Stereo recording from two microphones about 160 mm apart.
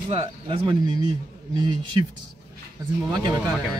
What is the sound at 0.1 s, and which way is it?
Speech, 30° right (ahead or behind).